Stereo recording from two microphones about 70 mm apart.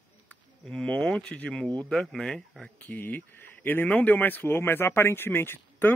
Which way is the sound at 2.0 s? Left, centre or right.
Centre.